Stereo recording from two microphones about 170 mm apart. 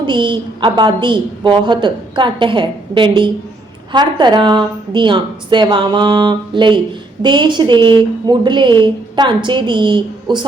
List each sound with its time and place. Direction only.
0.0 s a woman's voice: 30° right (ahead or behind)